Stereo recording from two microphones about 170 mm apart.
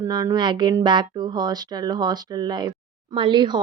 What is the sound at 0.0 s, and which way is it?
A woman's voice, 20° right (ahead or behind).